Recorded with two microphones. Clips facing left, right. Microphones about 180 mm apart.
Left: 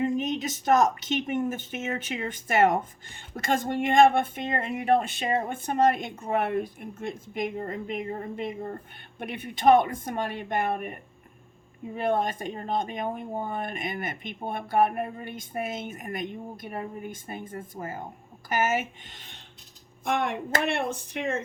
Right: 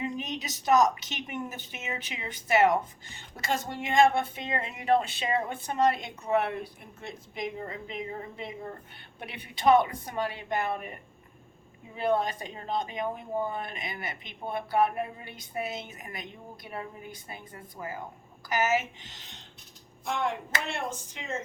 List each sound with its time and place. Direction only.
0.0 s speech: 50° left (ahead or behind)
11.9 s speech: 50° left (ahead or behind)